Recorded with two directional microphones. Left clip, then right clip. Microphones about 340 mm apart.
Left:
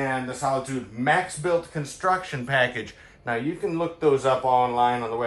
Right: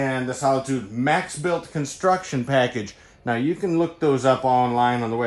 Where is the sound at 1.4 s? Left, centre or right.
Right.